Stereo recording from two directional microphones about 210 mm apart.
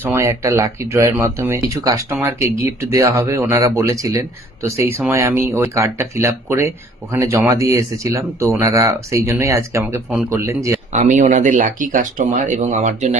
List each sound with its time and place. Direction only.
0.0 s speech: 10° right (ahead or behind)
10.9 s speech: 35° right (ahead or behind)